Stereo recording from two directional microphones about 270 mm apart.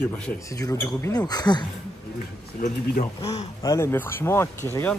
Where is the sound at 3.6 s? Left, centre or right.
Centre.